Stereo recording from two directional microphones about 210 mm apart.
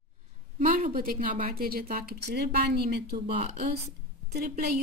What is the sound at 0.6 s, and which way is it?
A woman's voice, 40° right (ahead or behind).